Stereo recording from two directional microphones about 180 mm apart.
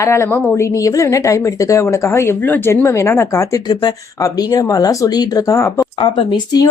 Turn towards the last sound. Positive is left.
turn(degrees=25)  # may be behind; listen again after turning